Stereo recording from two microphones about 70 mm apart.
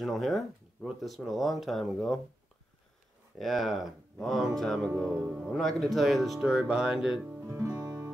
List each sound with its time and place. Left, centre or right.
0.0 s speech: centre
3.3 s speech: centre
7.4 s music: right
7.8 s music: right